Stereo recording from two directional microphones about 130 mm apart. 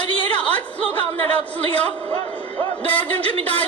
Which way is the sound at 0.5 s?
10° left (ahead or behind).